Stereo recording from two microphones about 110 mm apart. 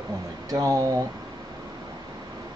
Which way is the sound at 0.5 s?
30° right (ahead or behind).